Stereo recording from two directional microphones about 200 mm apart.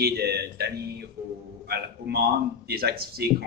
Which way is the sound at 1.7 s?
55° right (ahead or behind).